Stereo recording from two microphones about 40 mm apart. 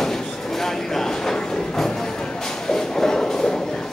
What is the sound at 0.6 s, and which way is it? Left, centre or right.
Train, centre.